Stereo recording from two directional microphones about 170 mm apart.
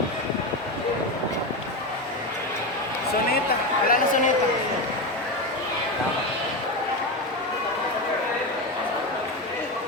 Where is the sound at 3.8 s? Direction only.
55° left (ahead or behind).